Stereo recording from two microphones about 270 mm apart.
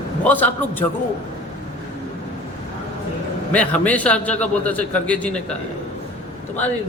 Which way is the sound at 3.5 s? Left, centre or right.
Centre.